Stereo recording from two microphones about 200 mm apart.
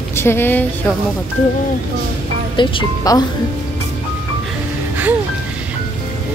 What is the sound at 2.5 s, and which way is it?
Speech, 25° left (ahead or behind).